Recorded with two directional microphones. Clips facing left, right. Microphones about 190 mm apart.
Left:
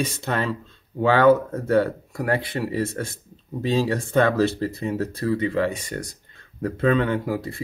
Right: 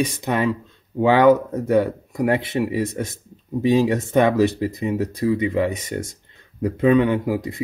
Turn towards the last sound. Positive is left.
turn(degrees=-20)  # may be behind; listen again after turning